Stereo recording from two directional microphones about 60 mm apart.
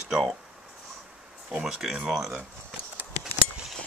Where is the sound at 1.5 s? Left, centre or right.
Centre.